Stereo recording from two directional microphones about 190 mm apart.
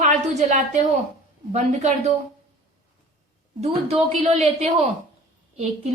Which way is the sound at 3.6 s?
30° right (ahead or behind).